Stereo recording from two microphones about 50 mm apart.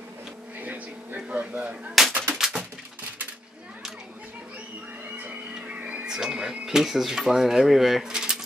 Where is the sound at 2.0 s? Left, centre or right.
Centre.